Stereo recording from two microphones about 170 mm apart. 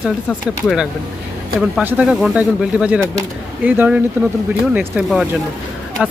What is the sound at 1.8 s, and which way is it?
Speech, 10° right (ahead or behind).